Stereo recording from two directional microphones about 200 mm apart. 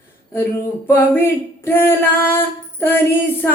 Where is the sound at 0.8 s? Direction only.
10° left (ahead or behind).